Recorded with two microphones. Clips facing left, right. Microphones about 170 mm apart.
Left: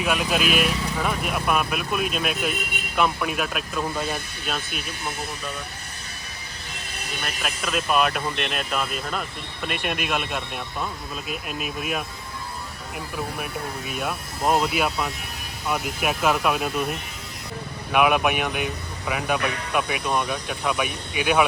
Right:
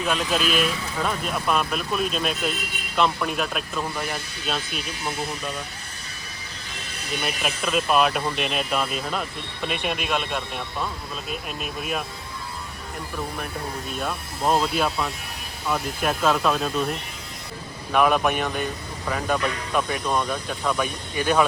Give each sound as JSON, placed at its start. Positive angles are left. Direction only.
{"t": 0.0, "sound": "speech", "side_deg": 10}
{"t": 3.9, "sound": "speech", "side_deg": 20}
{"t": 7.3, "sound": "speech", "side_deg": 0}
{"t": 13.4, "sound": "speech", "side_deg": 10}
{"t": 17.9, "sound": "speech", "side_deg": 10}